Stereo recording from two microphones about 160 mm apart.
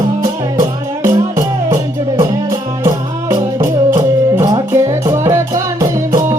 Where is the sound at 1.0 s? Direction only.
20° right (ahead or behind).